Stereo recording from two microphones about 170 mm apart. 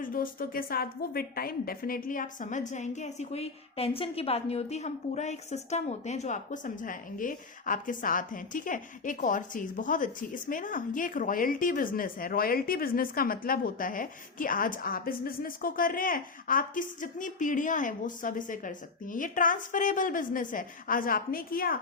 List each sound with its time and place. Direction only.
0.0 s a woman's voice: 55° left (ahead or behind)